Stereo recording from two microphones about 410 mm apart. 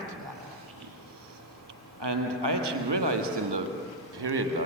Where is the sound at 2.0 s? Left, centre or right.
Right.